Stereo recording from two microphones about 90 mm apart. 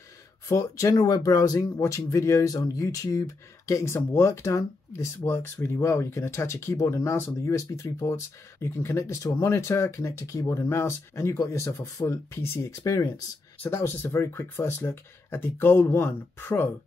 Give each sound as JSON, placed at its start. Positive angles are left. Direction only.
{"t": 0.5, "sound": "speech", "side_deg": 35}
{"t": 0.9, "sound": "speech", "side_deg": 45}
{"t": 13.6, "sound": "speech", "side_deg": 25}